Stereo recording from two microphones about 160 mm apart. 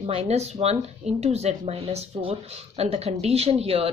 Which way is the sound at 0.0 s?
40° right (ahead or behind).